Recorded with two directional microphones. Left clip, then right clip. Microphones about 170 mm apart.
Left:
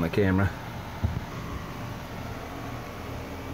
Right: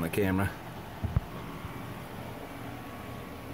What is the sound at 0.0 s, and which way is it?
Speech, 5° left (ahead or behind).